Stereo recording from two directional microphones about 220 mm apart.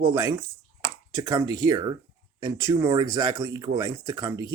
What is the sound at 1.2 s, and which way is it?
Speech, 15° right (ahead or behind).